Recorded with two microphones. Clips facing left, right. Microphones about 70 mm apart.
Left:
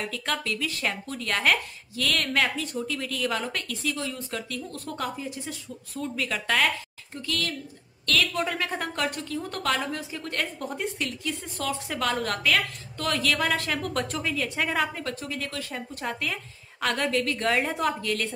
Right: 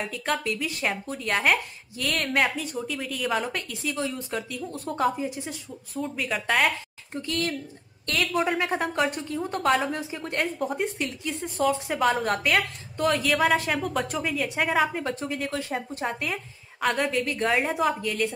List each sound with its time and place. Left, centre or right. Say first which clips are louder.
0.1 s a woman's voice: right 2 dB; centre
1.3 s a woman's voice: right 1 dB; centre
7.2 s a woman's voice: right 3 dB; right
8.3 s a woman's voice: right 4 dB; centre
15.0 s a woman's voice: right 3 dB; right
16.1 s a woman's voice: right 1 dB; centre